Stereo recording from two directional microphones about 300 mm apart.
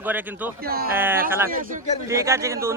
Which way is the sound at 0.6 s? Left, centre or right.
Right.